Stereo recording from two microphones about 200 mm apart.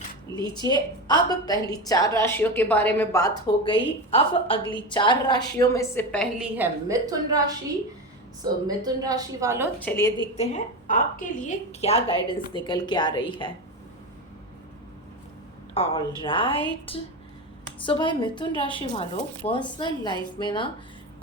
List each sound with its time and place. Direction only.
0.3 s a sound: 15° left (ahead or behind)
0.7 s a woman's voice: 20° left (ahead or behind)
6.4 s a woman's voice: 10° right (ahead or behind)
8.6 s a woman's voice: 20° right (ahead or behind)
9.8 s a woman's voice: 10° left (ahead or behind)
10.3 s a woman's voice: 40° left (ahead or behind)
15.7 s a woman's voice: 30° left (ahead or behind)